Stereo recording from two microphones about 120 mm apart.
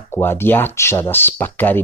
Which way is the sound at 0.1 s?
20° left (ahead or behind).